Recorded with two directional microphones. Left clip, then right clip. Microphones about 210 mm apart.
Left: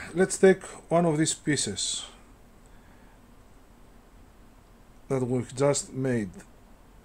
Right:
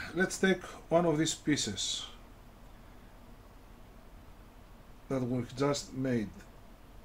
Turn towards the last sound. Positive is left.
turn(degrees=50)  # may be behind; listen again after turning